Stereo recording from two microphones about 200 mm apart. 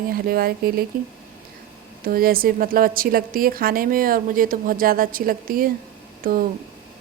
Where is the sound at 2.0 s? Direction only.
45° right (ahead or behind).